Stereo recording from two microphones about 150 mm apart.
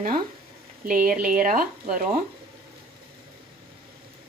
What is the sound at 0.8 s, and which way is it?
Speech, 70° right (ahead or behind).